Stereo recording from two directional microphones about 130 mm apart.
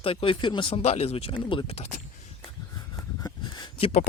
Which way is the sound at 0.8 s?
55° left (ahead or behind).